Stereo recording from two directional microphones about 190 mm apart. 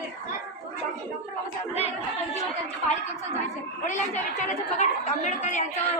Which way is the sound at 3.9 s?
40° left (ahead or behind).